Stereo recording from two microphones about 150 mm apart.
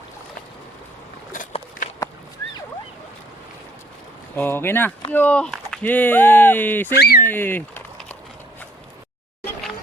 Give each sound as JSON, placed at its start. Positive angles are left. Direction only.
{"t": 4.4, "sound": "speech", "side_deg": 15}
{"t": 6.9, "sound": "speech", "side_deg": 90}
{"t": 7.2, "sound": "speech", "side_deg": 15}